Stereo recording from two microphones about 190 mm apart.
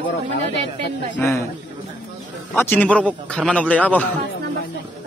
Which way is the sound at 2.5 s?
10° left (ahead or behind).